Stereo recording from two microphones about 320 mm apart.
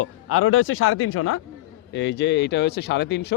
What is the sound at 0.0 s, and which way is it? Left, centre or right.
Speech, left.